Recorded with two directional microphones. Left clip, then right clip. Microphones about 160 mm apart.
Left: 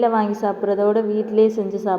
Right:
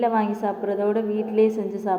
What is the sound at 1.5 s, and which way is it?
Speech, 15° left (ahead or behind).